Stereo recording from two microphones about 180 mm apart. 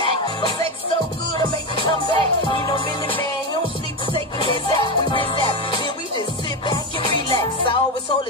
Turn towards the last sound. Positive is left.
turn(degrees=25)  # may be behind; listen again after turning